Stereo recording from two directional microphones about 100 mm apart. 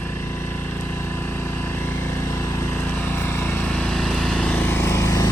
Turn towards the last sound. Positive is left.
turn(degrees=30)  # may be behind; listen again after turning